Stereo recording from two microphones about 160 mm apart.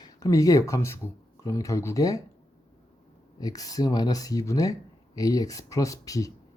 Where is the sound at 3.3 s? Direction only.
25° left (ahead or behind).